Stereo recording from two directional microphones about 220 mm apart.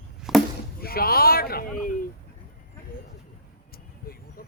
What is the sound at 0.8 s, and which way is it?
Speech, 45° left (ahead or behind).